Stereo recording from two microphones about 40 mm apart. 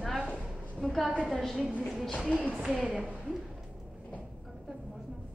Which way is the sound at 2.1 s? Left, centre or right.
Left.